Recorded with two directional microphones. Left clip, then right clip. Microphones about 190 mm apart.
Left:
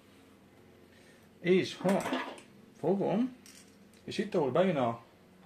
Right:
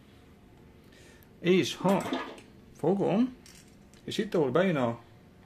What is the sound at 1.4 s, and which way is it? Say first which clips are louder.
Speech: right 2 dB; 55° right (ahead or behind).